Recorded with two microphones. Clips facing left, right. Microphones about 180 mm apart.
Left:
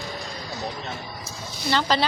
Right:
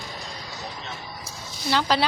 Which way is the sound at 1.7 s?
5° right (ahead or behind).